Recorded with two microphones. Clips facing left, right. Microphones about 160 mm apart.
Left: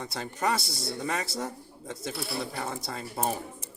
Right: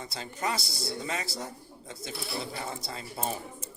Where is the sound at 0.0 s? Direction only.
65° left (ahead or behind).